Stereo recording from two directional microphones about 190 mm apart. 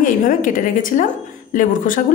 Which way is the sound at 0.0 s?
45° left (ahead or behind).